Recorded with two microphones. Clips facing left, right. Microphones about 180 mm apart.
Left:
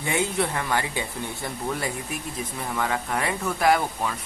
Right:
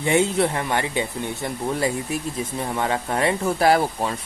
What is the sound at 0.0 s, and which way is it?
Speech, 25° right (ahead or behind).